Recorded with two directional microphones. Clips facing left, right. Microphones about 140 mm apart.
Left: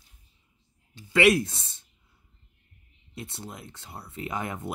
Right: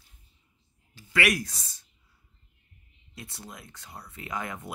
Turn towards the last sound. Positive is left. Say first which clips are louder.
# left 3 dB
turn(degrees=25)  # may be behind; listen again after turning